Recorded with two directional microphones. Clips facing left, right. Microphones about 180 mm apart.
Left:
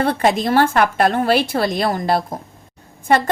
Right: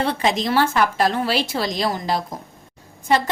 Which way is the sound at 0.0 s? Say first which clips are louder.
Left 4 dB; 55° left (ahead or behind).